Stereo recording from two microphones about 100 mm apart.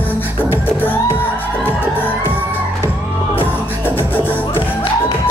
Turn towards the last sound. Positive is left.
turn(degrees=20)  # may be behind; listen again after turning